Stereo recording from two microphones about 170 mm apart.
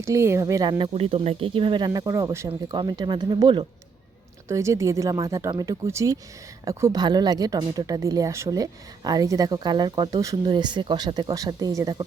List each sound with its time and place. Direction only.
0.0 s speech: 15° right (ahead or behind)